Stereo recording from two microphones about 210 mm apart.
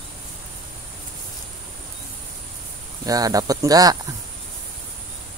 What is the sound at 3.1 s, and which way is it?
Speech, 15° right (ahead or behind).